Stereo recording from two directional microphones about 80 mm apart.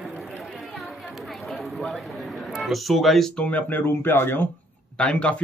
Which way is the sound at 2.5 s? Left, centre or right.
Centre.